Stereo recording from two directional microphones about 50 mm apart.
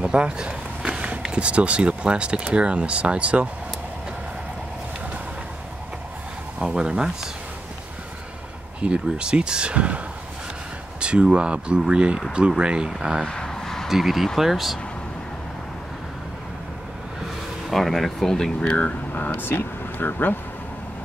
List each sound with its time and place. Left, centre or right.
0.0 s a sound: right
1.3 s speech: right
6.6 s speech: centre
8.8 s speech: centre
13.2 s vehicle: centre
13.8 s speech: centre
17.6 s speech: centre
18.6 s speech: left
19.1 s vehicle: left